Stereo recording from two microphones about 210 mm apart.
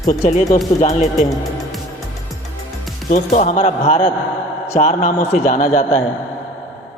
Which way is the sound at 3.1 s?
35° left (ahead or behind).